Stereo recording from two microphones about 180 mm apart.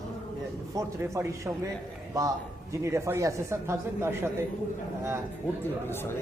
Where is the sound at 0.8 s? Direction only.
15° right (ahead or behind).